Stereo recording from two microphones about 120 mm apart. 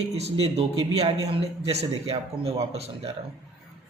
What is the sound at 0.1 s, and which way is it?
A man's voice, 60° right (ahead or behind).